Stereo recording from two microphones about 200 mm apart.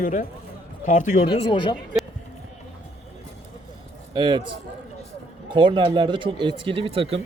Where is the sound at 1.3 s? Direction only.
25° left (ahead or behind).